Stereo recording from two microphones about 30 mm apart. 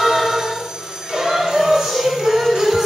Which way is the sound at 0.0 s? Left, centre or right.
Centre.